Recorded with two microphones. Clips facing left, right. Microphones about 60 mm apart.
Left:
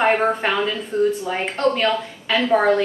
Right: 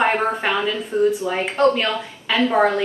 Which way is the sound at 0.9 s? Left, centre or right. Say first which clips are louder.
Right 1 dB; centre.